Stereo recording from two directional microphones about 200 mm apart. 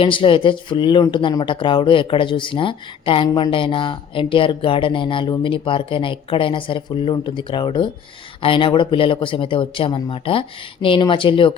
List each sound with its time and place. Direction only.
0.0 s speech: 25° left (ahead or behind)